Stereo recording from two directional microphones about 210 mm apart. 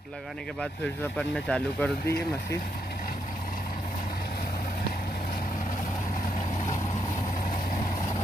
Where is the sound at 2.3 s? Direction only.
15° left (ahead or behind).